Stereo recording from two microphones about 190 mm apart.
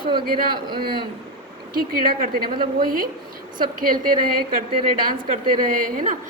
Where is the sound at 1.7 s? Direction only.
50° right (ahead or behind).